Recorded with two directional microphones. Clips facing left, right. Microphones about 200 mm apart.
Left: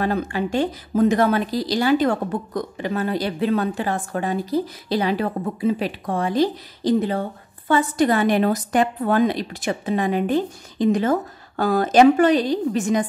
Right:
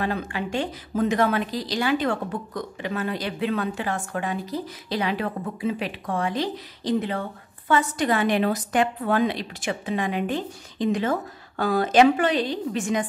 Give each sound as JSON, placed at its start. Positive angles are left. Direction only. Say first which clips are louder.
{"t": 0.0, "sound": "a woman's voice", "louder": "left 5 dB", "side_deg": 40}